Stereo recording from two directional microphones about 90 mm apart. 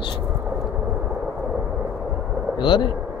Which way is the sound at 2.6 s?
65° left (ahead or behind).